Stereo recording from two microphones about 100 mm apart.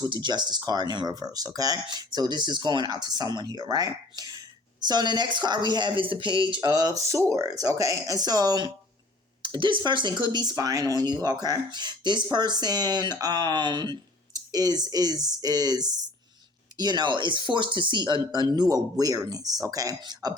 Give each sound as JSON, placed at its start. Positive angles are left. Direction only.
{"t": 0.1, "sound": "speech", "side_deg": -50}